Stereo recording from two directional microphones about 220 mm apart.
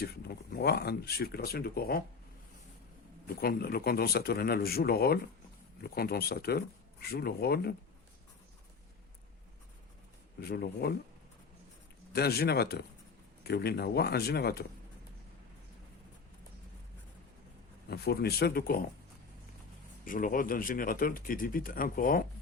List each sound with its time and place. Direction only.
0.0 s speech: 45° left (ahead or behind)
3.2 s speech: 45° left (ahead or behind)
10.4 s speech: 45° left (ahead or behind)
12.1 s speech: 45° left (ahead or behind)
17.8 s speech: 45° left (ahead or behind)
20.1 s speech: 40° left (ahead or behind)